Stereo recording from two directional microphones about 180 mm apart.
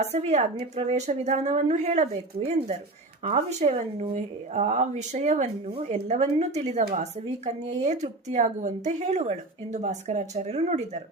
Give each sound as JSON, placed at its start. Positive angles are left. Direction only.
{"t": 0.0, "sound": "a woman's voice", "side_deg": -35}